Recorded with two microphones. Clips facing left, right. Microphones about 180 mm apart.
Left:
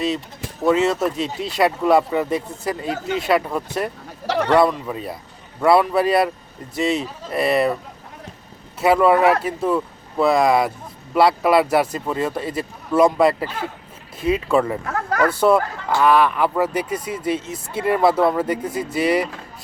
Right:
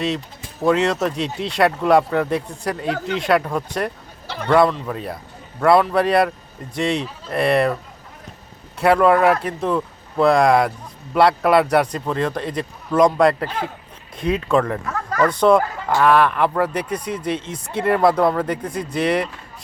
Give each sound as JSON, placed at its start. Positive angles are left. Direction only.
{"t": 0.6, "sound": "speech", "side_deg": 0}
{"t": 4.3, "sound": "a man's voice", "side_deg": 75}
{"t": 4.7, "sound": "speech", "side_deg": 5}
{"t": 8.8, "sound": "speech", "side_deg": 0}